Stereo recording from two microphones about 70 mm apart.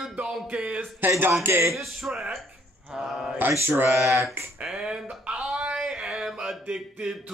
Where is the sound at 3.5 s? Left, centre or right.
Right.